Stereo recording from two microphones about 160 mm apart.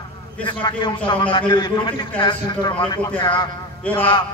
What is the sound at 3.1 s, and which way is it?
Speech, 30° left (ahead or behind).